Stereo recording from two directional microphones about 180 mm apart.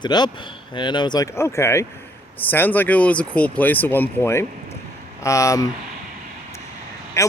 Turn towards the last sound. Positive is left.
turn(degrees=15)  # may be behind; listen again after turning